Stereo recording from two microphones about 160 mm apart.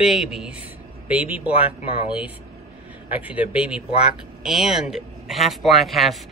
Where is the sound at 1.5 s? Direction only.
35° left (ahead or behind).